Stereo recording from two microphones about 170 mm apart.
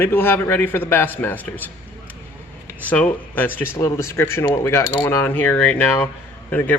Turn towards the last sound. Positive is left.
turn(degrees=10)  # may be behind; listen again after turning